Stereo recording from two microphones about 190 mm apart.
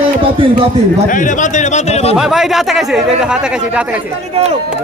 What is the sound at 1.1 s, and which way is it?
A man's voice, 40° left (ahead or behind).